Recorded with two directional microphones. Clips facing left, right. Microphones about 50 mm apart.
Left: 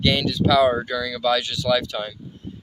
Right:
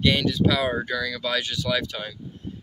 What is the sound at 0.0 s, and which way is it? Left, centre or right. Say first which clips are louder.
Speech: even; right.